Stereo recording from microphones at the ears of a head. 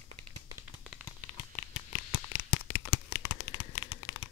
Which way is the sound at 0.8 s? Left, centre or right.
Left.